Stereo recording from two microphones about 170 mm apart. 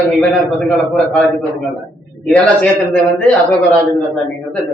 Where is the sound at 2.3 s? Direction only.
10° left (ahead or behind).